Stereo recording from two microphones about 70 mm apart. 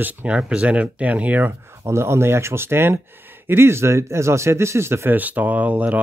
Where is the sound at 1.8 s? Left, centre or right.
Right.